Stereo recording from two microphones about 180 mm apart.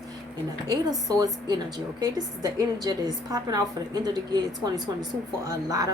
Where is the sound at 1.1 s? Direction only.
20° right (ahead or behind).